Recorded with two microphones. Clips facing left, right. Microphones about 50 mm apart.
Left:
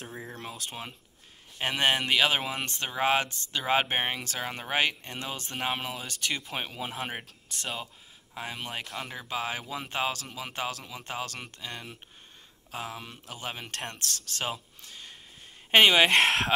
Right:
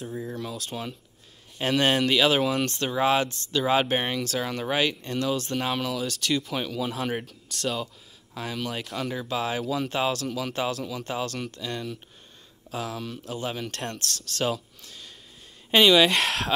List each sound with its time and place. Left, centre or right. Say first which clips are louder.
0.1 s speech: right 7 dB; left
8.8 s speech: right 7 dB; centre
11.1 s speech: right 4 dB; centre
11.5 s speech: right 7 dB; left
15.7 s speech: right 1 dB; left